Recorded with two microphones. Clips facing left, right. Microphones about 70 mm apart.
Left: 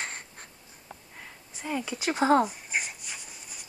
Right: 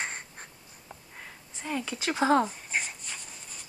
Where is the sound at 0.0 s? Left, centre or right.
Centre.